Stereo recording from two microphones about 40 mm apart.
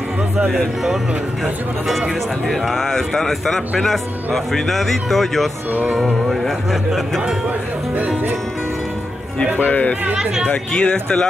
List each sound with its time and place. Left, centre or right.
1.4 s speech: centre
2.4 s speech: centre
5.7 s speech: right
6.2 s speech: centre
7.4 s speech: right
9.6 s speech: left
10.7 s speech: centre